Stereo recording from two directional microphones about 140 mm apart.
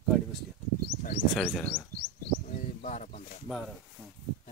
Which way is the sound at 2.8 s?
60° left (ahead or behind).